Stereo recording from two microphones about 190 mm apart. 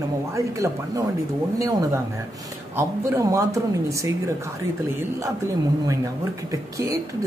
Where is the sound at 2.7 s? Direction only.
15° right (ahead or behind).